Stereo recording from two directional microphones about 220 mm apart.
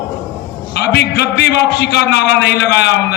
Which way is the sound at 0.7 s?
50° left (ahead or behind).